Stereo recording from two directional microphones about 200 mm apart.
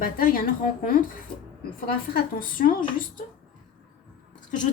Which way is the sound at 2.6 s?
45° left (ahead or behind).